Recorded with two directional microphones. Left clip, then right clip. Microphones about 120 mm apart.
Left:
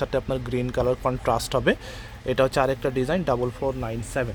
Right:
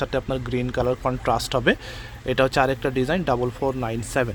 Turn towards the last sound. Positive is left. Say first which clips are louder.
# right 4 dB
turn(degrees=-35)  # may be behind; listen again after turning